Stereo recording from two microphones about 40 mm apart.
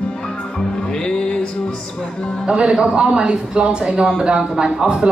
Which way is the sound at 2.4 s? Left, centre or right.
Right.